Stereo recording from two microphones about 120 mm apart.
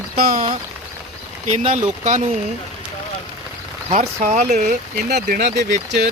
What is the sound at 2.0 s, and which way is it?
Speech, 90° right.